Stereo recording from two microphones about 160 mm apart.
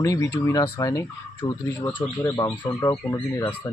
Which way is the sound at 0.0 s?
20° left (ahead or behind).